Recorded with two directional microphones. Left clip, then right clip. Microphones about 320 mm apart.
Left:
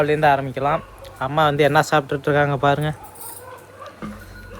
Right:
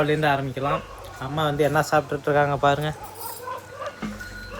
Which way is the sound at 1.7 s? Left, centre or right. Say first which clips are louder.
Left 4 dB; left.